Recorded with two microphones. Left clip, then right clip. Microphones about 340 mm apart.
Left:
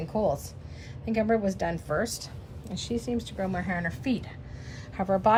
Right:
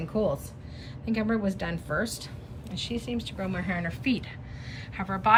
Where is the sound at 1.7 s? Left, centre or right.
Centre.